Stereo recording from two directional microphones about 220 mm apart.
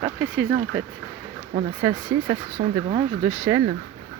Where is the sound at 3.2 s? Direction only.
5° right (ahead or behind).